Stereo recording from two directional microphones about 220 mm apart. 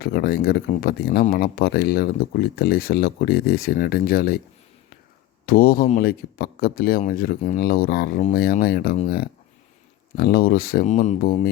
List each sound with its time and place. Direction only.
0.0 s speech: 45° left (ahead or behind)
5.5 s speech: 40° left (ahead or behind)